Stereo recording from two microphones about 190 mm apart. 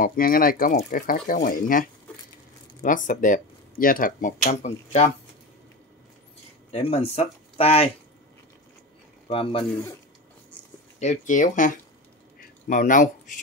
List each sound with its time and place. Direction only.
0.0 s speech: 50° left (ahead or behind)
6.7 s speech: 35° left (ahead or behind)
9.3 s speech: 30° left (ahead or behind)
11.0 s speech: 40° left (ahead or behind)
12.4 s a sound: 45° left (ahead or behind)